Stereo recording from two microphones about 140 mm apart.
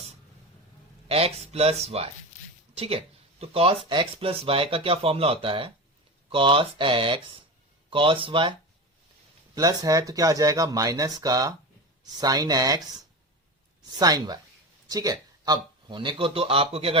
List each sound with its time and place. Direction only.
1.0 s speech: 45° right (ahead or behind)
9.6 s speech: 25° right (ahead or behind)
13.9 s a man's voice: 25° right (ahead or behind)